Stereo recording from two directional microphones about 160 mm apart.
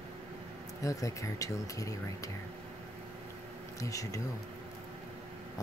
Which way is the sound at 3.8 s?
20° left (ahead or behind).